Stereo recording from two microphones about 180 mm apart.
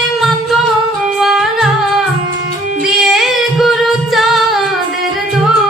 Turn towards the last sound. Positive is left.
turn(degrees=0)  # may be behind; listen again after turning